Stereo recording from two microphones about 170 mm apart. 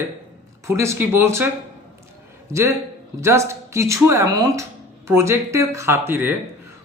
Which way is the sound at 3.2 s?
15° right (ahead or behind).